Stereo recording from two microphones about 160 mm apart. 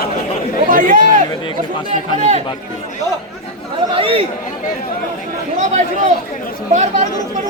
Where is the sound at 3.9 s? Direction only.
35° right (ahead or behind).